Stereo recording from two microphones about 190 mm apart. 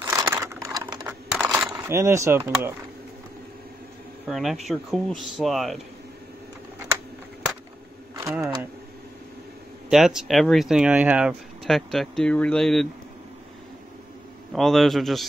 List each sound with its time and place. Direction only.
0.0 s a sound: 10° right (ahead or behind)
1.0 s crushing: 5° right (ahead or behind)
1.7 s speech: 15° right (ahead or behind)
4.3 s speech: centre (ahead or behind)
9.8 s speech: centre (ahead or behind)
14.5 s speech: centre (ahead or behind)